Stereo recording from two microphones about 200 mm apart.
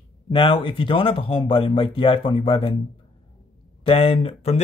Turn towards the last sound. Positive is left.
turn(degrees=30)  # may be behind; listen again after turning